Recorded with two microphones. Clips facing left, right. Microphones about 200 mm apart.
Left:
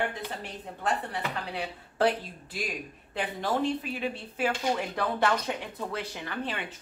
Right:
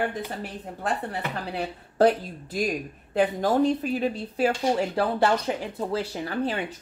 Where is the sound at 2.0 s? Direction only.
45° right (ahead or behind).